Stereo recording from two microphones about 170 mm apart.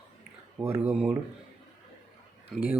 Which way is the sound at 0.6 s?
15° right (ahead or behind).